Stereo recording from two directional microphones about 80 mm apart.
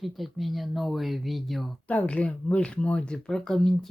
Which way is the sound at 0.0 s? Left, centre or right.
Centre.